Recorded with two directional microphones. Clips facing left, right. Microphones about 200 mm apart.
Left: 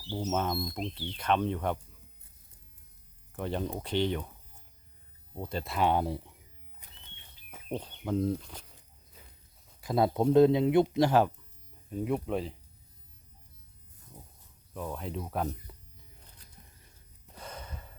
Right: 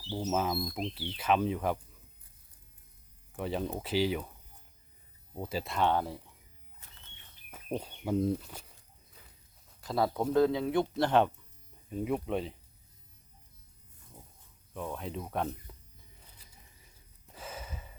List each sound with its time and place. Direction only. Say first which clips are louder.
0.2 s speech: even; centre (ahead or behind)
3.3 s speech: even; centre (ahead or behind)
5.3 s speech: even; 5° right (ahead or behind)
5.8 s speech: left 2 dB; 15° left (ahead or behind)
6.8 s bird flight: left 2 dB; 15° left (ahead or behind)
7.5 s speech: right 1 dB; 5° right (ahead or behind)
9.8 s speech: left 4 dB; 20° left (ahead or behind)
11.9 s speech: left 1 dB; centre (ahead or behind)
14.7 s speech: left 1 dB; centre (ahead or behind)
16.2 s a sound: left 3 dB; 5° right (ahead or behind)